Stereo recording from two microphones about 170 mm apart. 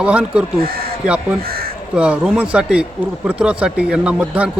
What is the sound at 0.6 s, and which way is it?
Speech, 60° right (ahead or behind).